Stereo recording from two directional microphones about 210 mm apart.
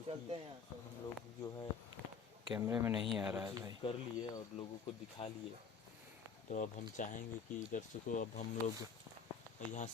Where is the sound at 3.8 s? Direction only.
25° left (ahead or behind).